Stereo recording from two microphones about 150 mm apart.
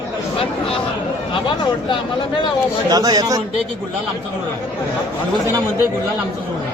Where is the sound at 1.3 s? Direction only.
35° left (ahead or behind).